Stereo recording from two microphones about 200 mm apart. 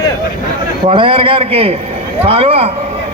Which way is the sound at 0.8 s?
25° right (ahead or behind).